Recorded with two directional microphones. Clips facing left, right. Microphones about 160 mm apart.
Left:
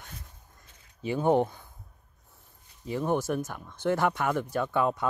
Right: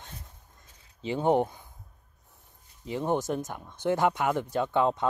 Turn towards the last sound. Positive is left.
turn(degrees=-25)  # may be behind; listen again after turning